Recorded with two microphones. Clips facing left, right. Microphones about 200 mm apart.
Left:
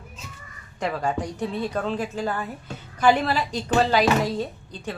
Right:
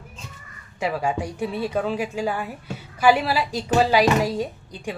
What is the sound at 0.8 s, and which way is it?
A woman's voice, 10° right (ahead or behind).